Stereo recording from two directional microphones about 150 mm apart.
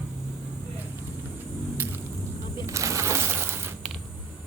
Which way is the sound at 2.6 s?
20° right (ahead or behind).